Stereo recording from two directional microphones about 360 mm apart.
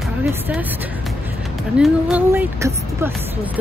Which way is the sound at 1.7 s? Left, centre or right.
Centre.